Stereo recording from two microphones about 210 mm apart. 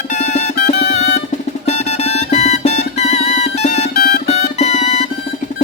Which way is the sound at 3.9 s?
45° left (ahead or behind).